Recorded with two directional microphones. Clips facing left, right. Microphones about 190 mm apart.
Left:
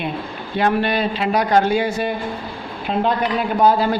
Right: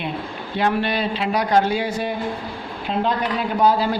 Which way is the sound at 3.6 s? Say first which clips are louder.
Left 2 dB; 55° left (ahead or behind).